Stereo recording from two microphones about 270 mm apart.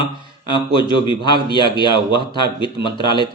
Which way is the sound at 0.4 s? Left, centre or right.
Centre.